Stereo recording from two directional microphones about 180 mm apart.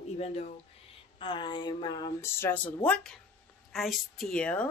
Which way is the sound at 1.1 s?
25° left (ahead or behind).